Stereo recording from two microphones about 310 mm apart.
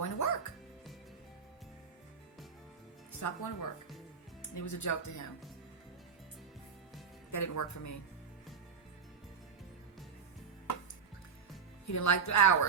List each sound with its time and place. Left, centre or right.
0.0 s music: left
3.1 s speech: left
7.3 s speech: left
11.9 s speech: left